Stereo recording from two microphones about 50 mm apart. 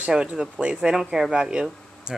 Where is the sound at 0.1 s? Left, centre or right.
Centre.